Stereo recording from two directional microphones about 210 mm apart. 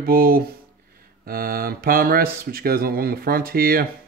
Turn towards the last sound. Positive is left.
turn(degrees=-45)  # may be behind; listen again after turning